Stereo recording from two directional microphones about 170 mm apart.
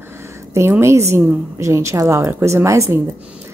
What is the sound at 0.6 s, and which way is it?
Speech, 15° right (ahead or behind).